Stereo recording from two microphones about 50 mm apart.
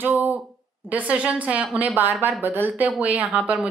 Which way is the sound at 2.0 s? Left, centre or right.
Right.